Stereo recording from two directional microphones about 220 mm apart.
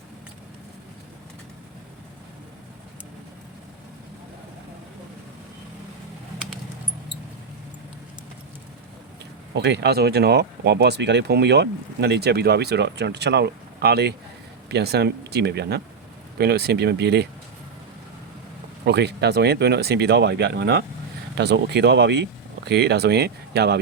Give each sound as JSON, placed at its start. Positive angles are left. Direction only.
{"t": 9.6, "sound": "speech", "side_deg": -50}
{"t": 18.9, "sound": "speech", "side_deg": -50}